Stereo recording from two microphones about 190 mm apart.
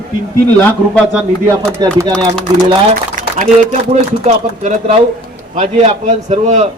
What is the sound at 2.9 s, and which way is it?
Speech, 45° right (ahead or behind).